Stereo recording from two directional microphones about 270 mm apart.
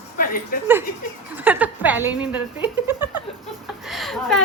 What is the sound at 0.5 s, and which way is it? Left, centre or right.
Speech, left.